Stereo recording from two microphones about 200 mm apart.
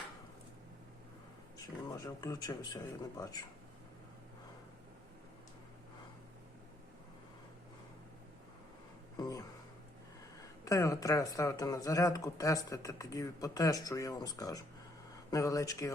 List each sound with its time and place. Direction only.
1.5 s speech: 15° left (ahead or behind)
9.1 s a sound: 20° left (ahead or behind)
10.7 s speech: 15° left (ahead or behind)